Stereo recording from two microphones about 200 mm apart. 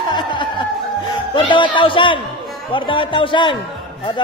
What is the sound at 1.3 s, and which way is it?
A man's voice, 25° left (ahead or behind).